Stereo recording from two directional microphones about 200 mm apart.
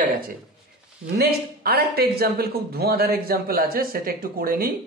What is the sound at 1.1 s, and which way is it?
Speech, 50° right (ahead or behind).